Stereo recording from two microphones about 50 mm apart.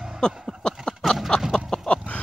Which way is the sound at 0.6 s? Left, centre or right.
Centre.